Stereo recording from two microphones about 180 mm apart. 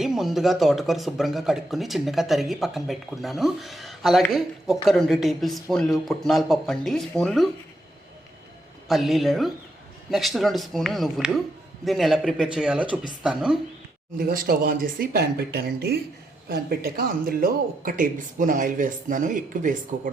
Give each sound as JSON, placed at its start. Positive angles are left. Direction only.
{"t": 0.0, "sound": "speech", "side_deg": 0}
{"t": 8.9, "sound": "speech", "side_deg": 0}
{"t": 14.2, "sound": "speech", "side_deg": -55}